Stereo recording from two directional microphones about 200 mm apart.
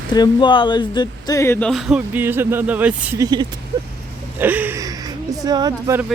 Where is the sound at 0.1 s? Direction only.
20° left (ahead or behind); by 6.1 s 15° right (ahead or behind).